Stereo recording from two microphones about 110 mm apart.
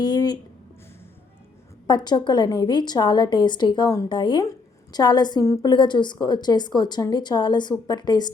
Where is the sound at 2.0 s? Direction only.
40° left (ahead or behind).